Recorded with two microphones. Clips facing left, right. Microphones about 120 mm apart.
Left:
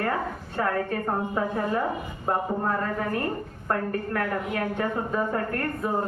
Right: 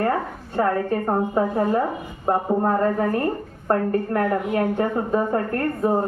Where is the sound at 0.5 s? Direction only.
30° right (ahead or behind).